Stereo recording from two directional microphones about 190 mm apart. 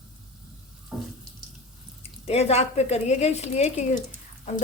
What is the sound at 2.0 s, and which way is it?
Speech, 35° left (ahead or behind).